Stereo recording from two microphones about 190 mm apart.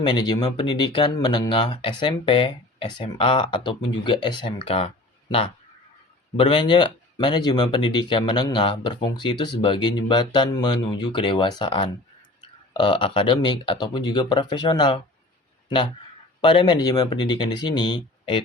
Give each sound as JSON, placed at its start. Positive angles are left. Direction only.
{"t": 0.0, "sound": "speech", "side_deg": 20}
{"t": 6.3, "sound": "speech", "side_deg": 25}
{"t": 16.4, "sound": "speech", "side_deg": 25}